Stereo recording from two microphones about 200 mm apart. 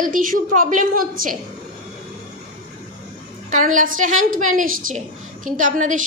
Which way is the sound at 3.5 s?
40° right (ahead or behind).